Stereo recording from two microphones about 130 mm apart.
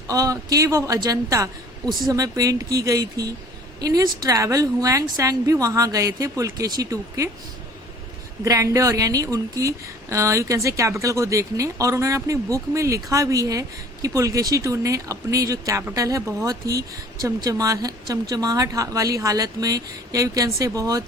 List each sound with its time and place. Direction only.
0.1 s a woman's voice: 25° right (ahead or behind)
8.4 s a woman's voice: 25° right (ahead or behind)